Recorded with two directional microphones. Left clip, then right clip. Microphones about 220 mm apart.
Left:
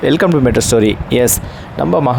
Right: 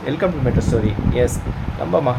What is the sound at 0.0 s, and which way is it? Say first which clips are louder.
Speech: left 9 dB; 45° left (ahead or behind).